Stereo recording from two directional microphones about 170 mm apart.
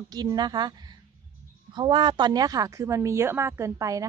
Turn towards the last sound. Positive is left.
turn(degrees=-20)  # may be behind; listen again after turning